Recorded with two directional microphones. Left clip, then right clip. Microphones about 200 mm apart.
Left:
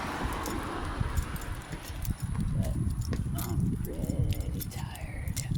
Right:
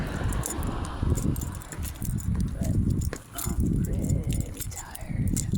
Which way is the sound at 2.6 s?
50° right (ahead or behind).